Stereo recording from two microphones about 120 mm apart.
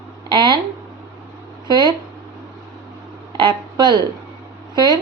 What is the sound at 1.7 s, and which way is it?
Speech, 40° right (ahead or behind).